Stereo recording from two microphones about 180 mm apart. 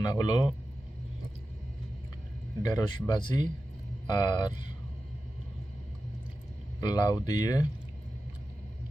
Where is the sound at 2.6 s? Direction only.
25° left (ahead or behind).